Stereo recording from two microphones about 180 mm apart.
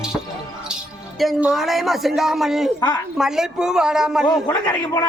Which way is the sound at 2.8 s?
20° left (ahead or behind).